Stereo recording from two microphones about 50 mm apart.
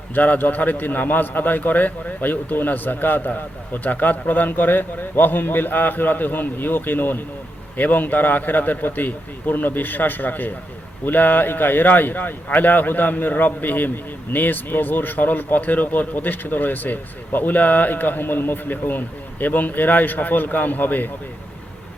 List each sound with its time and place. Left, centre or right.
0.1 s a man's voice: left